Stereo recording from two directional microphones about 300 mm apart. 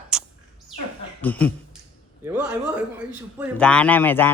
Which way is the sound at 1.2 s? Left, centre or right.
Centre.